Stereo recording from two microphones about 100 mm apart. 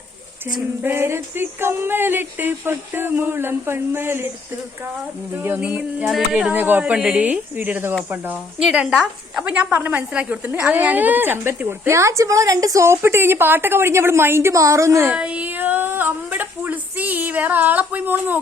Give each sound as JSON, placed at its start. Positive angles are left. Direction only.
{"t": 0.8, "sound": "a woman's voice", "side_deg": -20}
{"t": 5.3, "sound": "a woman's voice", "side_deg": -20}
{"t": 15.1, "sound": "a woman's voice", "side_deg": -10}